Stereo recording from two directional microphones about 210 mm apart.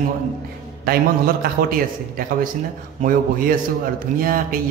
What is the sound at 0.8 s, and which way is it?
Speech, 45° right (ahead or behind).